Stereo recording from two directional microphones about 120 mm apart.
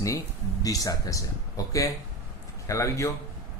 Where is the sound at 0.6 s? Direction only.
30° left (ahead or behind).